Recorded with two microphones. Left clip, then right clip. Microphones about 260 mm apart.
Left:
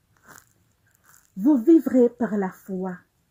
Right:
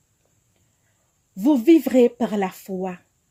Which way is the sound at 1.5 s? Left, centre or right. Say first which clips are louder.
Right 1 dB; centre.